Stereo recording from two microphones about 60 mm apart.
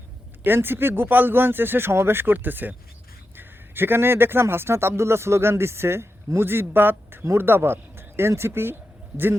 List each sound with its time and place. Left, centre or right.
0.4 s a man's voice: right